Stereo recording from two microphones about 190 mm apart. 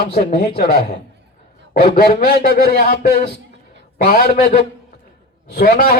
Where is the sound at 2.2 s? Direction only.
60° left (ahead or behind).